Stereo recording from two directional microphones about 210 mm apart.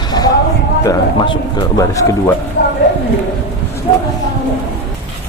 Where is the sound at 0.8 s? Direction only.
20° left (ahead or behind).